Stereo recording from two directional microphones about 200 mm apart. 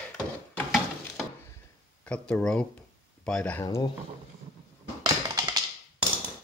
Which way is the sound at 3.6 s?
20° left (ahead or behind).